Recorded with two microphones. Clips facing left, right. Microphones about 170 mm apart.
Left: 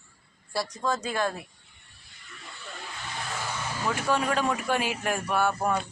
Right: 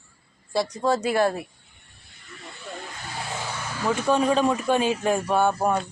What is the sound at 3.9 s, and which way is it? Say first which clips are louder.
Speech: right 6 dB; 20° right (ahead or behind).